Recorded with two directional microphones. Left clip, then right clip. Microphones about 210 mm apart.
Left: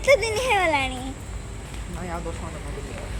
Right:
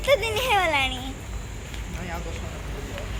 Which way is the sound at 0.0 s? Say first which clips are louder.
Left 2 dB; 50° left (ahead or behind).